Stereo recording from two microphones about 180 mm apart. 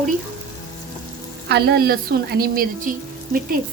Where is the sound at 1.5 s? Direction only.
65° right (ahead or behind).